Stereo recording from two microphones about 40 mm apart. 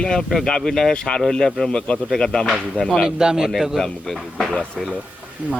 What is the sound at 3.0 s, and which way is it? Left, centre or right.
Speech, centre.